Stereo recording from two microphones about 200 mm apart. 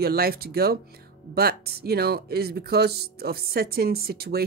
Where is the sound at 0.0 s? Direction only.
50° right (ahead or behind).